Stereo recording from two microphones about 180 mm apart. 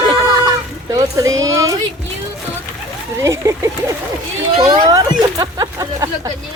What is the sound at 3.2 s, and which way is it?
Speech, 15° right (ahead or behind).